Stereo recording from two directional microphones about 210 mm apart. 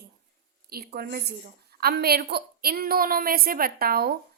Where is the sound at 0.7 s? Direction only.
45° right (ahead or behind).